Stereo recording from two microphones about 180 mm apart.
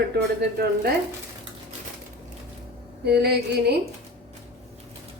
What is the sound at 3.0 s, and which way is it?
Speech, 65° right (ahead or behind).